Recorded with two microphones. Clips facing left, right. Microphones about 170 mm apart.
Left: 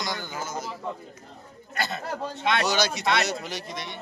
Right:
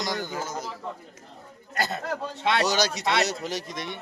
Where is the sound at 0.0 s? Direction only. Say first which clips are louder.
Right 2 dB; 40° right (ahead or behind).